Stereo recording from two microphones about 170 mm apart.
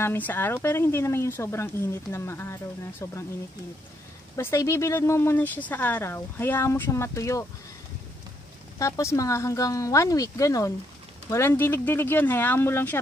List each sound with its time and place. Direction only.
0.0 s speech: 10° left (ahead or behind)
4.4 s speech: 15° left (ahead or behind)
8.7 s speech: 20° left (ahead or behind)